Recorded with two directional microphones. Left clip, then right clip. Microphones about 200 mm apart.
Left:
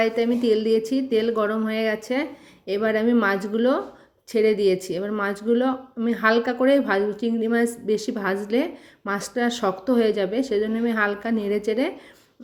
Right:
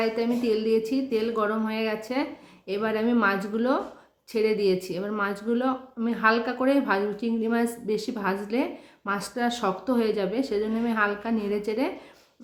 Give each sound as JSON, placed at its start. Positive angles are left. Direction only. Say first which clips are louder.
{"t": 0.0, "sound": "speech", "louder": "left 4 dB", "side_deg": 20}